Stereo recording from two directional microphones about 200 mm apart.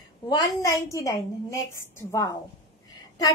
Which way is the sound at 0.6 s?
15° left (ahead or behind).